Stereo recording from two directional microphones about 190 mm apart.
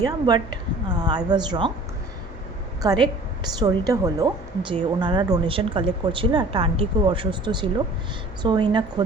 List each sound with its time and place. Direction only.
0.0 s speech: 20° right (ahead or behind)
2.8 s speech: 20° right (ahead or behind)